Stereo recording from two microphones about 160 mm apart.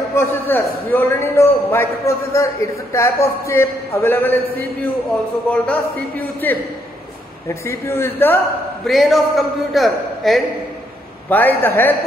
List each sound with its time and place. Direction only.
0.1 s a man's voice: 15° left (ahead or behind)
8.8 s a man's voice: centre (ahead or behind)
11.2 s a man's voice: 10° left (ahead or behind)